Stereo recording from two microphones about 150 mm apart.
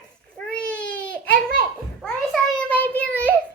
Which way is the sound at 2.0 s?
5° left (ahead or behind).